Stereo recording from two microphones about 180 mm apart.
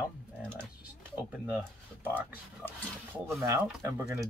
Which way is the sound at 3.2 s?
15° right (ahead or behind).